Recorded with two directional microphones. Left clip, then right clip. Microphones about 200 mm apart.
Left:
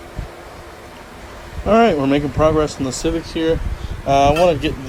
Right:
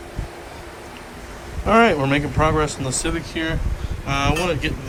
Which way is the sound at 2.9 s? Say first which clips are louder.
Left 4 dB; 15° left (ahead or behind).